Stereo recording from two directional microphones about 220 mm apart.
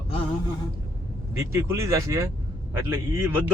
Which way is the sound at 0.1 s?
25° left (ahead or behind).